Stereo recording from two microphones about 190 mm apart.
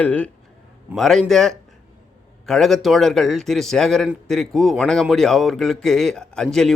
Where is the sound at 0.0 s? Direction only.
10° left (ahead or behind).